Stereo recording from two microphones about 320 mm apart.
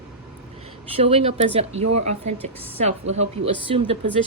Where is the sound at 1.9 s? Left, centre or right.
Right.